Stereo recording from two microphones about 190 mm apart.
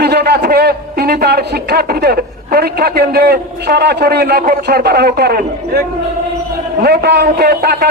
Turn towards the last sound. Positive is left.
turn(degrees=-55)  # may be behind; listen again after turning